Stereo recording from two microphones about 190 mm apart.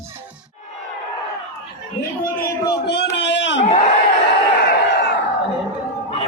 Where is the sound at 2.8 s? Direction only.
65° left (ahead or behind).